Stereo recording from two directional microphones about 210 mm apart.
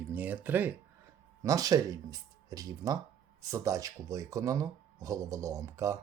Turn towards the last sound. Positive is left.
turn(degrees=-15)  # may be behind; listen again after turning